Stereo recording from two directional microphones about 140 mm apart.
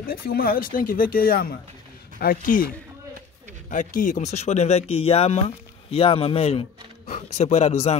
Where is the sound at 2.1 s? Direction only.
75° left (ahead or behind).